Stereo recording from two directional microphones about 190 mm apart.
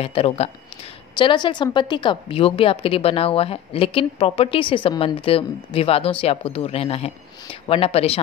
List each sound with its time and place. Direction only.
0.0 s speech: 30° left (ahead or behind)